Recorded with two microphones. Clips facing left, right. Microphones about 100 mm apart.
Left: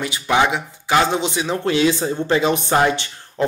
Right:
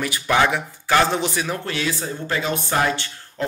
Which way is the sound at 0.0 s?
20° left (ahead or behind).